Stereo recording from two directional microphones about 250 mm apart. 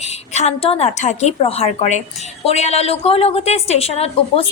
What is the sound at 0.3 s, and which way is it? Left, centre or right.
A woman's voice, left.